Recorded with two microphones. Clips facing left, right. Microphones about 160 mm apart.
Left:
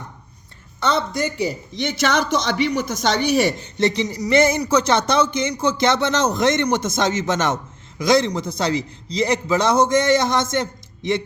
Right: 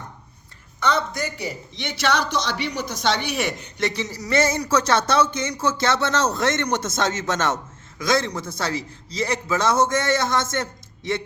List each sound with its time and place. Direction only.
0.9 s a woman's voice: 30° left (ahead or behind)
1.7 s a man's voice: 45° left (ahead or behind); by 10.6 s 15° left (ahead or behind)